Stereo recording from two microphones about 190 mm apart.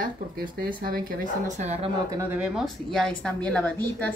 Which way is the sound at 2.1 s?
5° right (ahead or behind).